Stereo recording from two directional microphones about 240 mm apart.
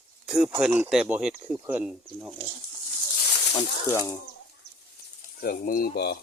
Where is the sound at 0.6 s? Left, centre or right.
Centre.